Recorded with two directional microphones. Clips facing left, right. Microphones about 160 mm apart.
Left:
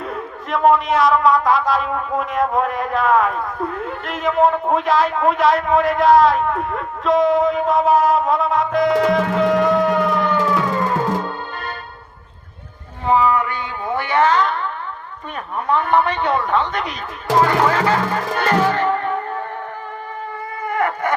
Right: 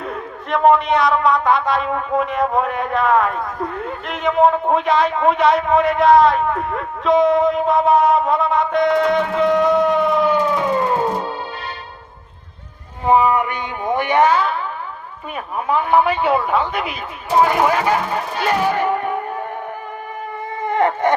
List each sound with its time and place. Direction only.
0.0 s a man's voice: centre (ahead or behind)
10.3 s music: 20° right (ahead or behind)
13.1 s a man's voice: 20° right (ahead or behind)
18.6 s music: 10° right (ahead or behind)
20.6 s a sound: 25° right (ahead or behind)